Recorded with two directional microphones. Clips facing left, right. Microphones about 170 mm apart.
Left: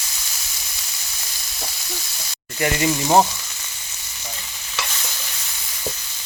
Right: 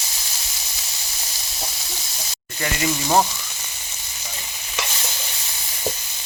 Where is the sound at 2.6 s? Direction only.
20° left (ahead or behind).